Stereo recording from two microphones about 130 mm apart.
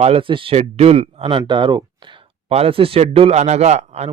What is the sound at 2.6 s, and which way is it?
Speech, 45° right (ahead or behind).